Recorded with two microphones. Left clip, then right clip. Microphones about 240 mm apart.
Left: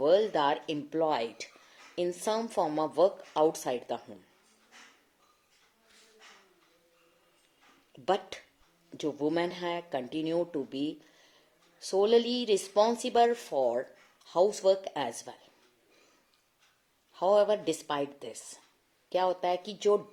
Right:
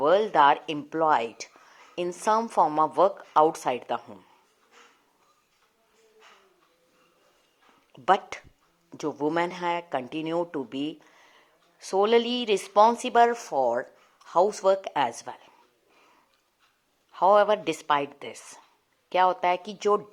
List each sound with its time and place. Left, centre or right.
0.0 s a woman's voice: centre
8.0 s a woman's voice: centre
10.8 s a sound: centre
11.9 s a woman's voice: centre
13.7 s a sound: centre
15.1 s a woman's voice: centre
17.1 s a woman's voice: centre